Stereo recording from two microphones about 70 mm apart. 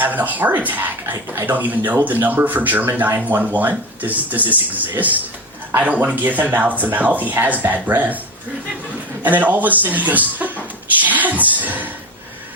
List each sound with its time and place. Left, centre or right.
0.0 s a man's voice: right
9.2 s a man's voice: right
11.0 s music: right